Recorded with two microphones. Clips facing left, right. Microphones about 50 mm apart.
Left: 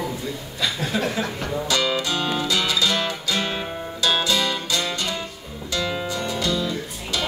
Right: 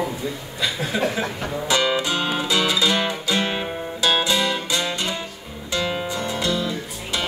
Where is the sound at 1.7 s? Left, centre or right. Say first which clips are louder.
Right 3 dB; right.